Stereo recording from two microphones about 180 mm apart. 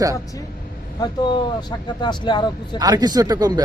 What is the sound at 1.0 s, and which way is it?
Speech, 25° left (ahead or behind).